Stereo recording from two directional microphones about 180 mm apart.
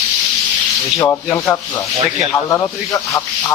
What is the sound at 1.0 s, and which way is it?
Speech, 15° left (ahead or behind).